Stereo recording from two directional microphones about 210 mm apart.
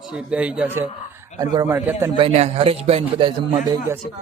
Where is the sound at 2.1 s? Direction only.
30° right (ahead or behind).